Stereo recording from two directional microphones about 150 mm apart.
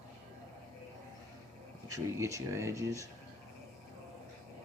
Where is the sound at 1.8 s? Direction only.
20° right (ahead or behind).